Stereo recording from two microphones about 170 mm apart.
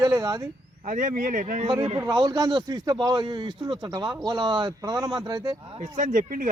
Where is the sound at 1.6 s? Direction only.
30° right (ahead or behind).